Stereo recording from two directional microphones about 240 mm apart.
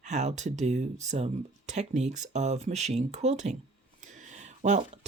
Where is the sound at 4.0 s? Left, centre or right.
Right.